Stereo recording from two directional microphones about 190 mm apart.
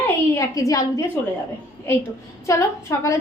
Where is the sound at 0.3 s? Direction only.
15° left (ahead or behind).